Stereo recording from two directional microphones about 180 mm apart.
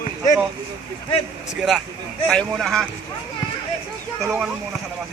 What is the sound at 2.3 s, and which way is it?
Speech, centre (ahead or behind).